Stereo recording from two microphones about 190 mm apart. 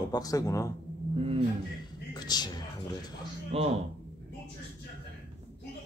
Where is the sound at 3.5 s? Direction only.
30° right (ahead or behind).